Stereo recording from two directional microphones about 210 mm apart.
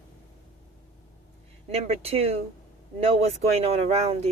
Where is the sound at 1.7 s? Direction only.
30° right (ahead or behind).